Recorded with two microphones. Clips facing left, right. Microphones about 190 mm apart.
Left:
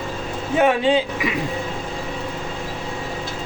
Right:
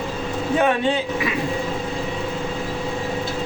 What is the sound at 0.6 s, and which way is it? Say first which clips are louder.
Speech: left 4 dB; 15° left (ahead or behind).